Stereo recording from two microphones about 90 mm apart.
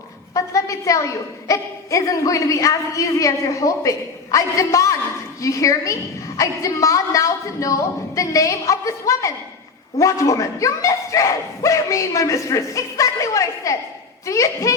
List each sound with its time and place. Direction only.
0.3 s a woman's voice: 35° left (ahead or behind)